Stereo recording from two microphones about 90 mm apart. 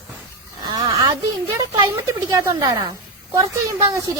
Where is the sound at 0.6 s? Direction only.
50° right (ahead or behind).